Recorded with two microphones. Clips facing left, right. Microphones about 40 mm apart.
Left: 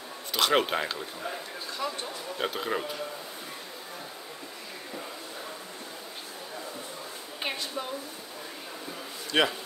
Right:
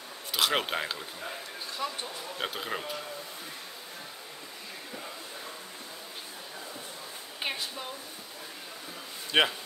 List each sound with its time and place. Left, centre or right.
0.3 s speech: centre
9.3 s speech: centre